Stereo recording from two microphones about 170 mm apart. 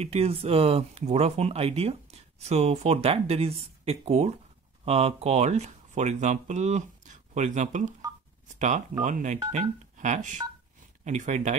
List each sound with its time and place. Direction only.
0.0 s speech: 35° right (ahead or behind)